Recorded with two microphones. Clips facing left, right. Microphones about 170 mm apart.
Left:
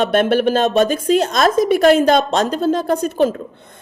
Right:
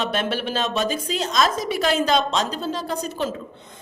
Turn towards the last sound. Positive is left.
turn(degrees=55)  # may be behind; listen again after turning